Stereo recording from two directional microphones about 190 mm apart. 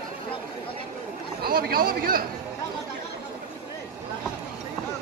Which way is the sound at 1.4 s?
55° right (ahead or behind).